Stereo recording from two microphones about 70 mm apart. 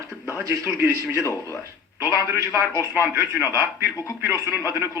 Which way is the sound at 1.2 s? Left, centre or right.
Left.